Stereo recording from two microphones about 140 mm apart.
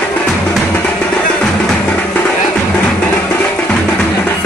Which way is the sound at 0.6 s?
5° left (ahead or behind).